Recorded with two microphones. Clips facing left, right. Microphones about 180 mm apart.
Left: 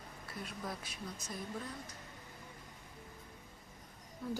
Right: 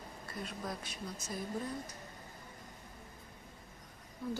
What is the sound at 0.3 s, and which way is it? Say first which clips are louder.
Speech: right 2 dB; 5° left (ahead or behind).